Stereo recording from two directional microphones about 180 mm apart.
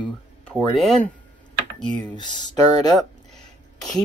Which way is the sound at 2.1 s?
25° left (ahead or behind).